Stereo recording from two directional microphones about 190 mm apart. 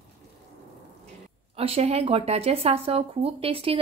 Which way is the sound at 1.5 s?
30° right (ahead or behind).